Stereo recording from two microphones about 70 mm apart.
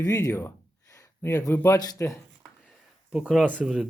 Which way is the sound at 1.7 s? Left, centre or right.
Left.